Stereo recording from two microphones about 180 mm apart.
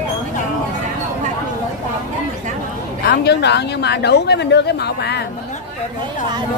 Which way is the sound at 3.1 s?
70° left (ahead or behind).